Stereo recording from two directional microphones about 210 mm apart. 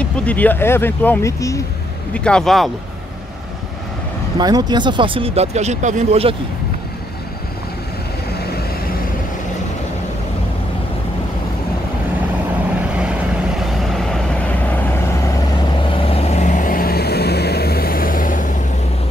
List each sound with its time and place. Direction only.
0.0 s speech: 5° left (ahead or behind)
2.1 s speech: 5° left (ahead or behind)
4.4 s speech: 20° right (ahead or behind)
13.7 s vehicle: centre (ahead or behind)
15.9 s vehicle: 25° left (ahead or behind)